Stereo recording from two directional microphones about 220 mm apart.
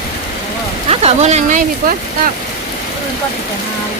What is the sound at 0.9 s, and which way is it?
Speech, 30° right (ahead or behind).